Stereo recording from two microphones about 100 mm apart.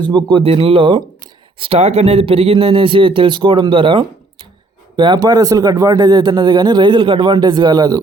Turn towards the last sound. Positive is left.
turn(degrees=-45)  # may be behind; listen again after turning